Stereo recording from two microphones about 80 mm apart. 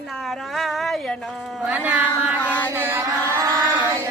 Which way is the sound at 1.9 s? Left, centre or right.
Centre.